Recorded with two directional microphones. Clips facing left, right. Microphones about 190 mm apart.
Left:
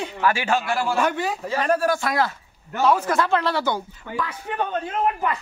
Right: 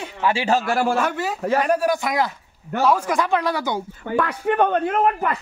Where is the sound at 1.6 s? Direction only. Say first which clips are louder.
Left 1 dB; 15° right (ahead or behind).